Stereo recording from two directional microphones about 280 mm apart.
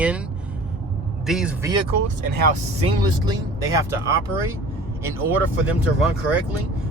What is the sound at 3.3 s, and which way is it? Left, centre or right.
Speech, centre.